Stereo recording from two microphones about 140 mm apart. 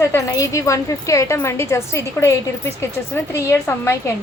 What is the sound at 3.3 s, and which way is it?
Speech, 20° left (ahead or behind).